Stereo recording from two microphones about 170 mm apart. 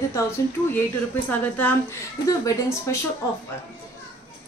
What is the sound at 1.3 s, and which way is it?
Speech, 10° left (ahead or behind).